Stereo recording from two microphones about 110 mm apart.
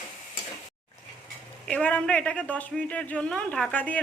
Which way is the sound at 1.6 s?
10° left (ahead or behind).